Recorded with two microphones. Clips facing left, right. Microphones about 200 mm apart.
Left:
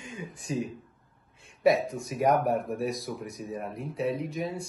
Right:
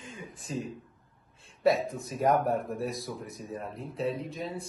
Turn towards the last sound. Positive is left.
turn(degrees=15)  # may be behind; listen again after turning